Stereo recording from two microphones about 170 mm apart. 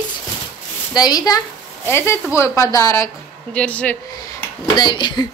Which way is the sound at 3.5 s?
10° left (ahead or behind).